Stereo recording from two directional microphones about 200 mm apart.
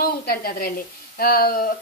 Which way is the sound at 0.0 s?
50° left (ahead or behind).